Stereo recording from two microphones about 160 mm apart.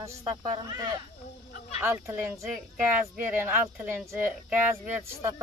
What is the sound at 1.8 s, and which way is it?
A man's voice, 15° right (ahead or behind).